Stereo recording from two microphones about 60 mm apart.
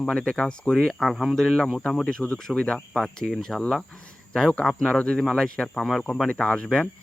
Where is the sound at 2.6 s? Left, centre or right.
Centre.